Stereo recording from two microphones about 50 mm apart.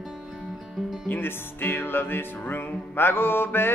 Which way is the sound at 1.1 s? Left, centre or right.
Left.